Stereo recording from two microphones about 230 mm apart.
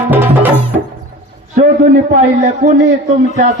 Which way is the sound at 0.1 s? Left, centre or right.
Centre.